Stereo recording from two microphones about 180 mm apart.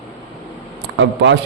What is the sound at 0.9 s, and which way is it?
Speech, 90° right.